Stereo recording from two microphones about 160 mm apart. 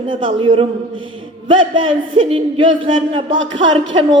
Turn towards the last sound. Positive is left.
turn(degrees=-30)  # may be behind; listen again after turning